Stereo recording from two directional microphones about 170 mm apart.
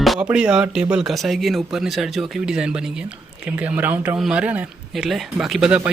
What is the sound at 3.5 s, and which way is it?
A man's voice, 10° right (ahead or behind).